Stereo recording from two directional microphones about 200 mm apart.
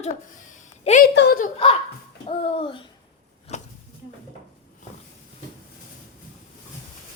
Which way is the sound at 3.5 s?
35° left (ahead or behind).